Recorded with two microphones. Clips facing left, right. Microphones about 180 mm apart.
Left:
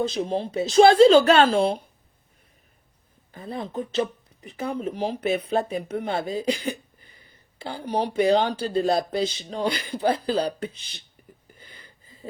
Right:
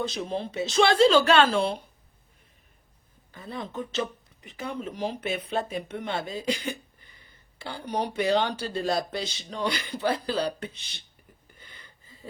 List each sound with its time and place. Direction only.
0.0 s speech: 35° left (ahead or behind)
3.3 s speech: 35° left (ahead or behind)
11.5 s a sound: 35° left (ahead or behind)